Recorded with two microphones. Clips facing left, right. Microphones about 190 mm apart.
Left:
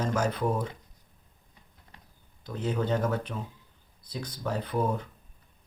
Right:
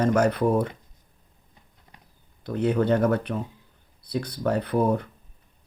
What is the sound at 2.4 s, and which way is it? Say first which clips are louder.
Speech: right 7 dB; 60° right (ahead or behind).